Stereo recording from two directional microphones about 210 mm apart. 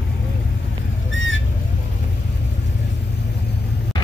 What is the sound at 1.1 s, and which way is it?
Squawk, 65° left (ahead or behind).